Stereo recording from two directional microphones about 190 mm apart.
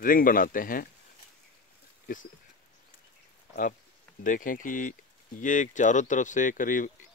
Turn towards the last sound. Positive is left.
turn(degrees=45)  # may be behind; listen again after turning